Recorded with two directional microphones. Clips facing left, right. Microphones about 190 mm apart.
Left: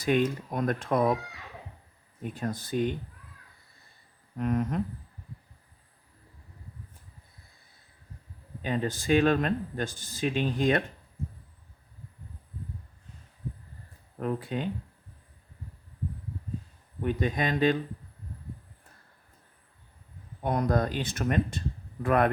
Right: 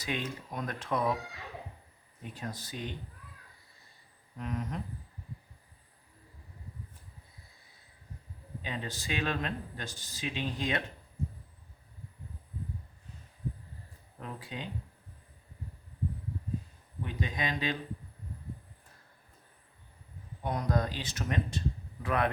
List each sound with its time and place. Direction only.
0.0 s speech: 50° left (ahead or behind)
2.4 s speech: 50° left (ahead or behind)
4.4 s speech: 55° left (ahead or behind)
8.6 s speech: 50° left (ahead or behind)
14.2 s speech: 55° left (ahead or behind)
17.0 s speech: 50° left (ahead or behind)
20.4 s speech: 55° left (ahead or behind)